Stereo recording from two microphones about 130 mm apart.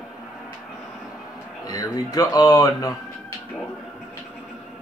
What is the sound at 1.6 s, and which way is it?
Speech, 30° left (ahead or behind).